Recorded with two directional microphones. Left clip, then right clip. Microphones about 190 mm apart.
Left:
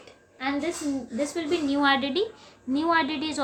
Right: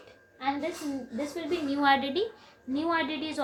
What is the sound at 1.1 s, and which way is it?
A woman's voice, 25° left (ahead or behind).